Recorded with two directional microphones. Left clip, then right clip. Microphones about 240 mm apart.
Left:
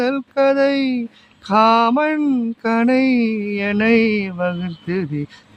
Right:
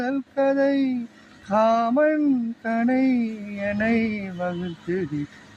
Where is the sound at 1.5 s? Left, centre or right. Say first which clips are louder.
Left 6 dB; left.